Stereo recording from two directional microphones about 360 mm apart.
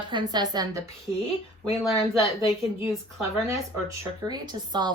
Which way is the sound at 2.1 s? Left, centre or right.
Centre.